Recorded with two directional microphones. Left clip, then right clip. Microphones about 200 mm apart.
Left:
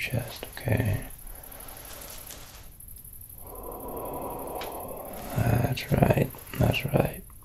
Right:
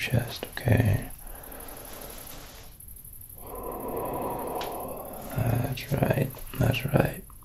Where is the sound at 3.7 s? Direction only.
30° right (ahead or behind).